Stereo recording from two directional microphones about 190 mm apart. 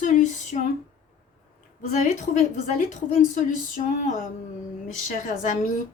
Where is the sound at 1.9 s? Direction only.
40° left (ahead or behind).